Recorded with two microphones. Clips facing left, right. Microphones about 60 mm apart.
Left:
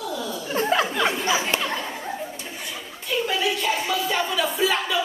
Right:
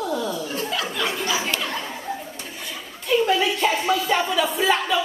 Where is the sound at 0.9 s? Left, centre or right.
Left.